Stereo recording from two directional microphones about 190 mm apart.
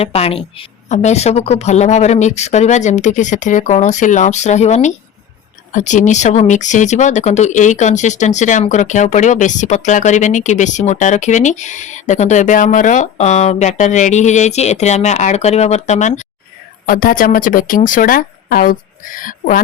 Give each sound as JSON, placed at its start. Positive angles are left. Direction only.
{"t": 0.0, "sound": "speech", "side_deg": 30}